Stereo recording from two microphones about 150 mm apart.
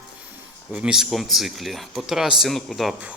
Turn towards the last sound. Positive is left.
turn(degrees=0)  # may be behind; listen again after turning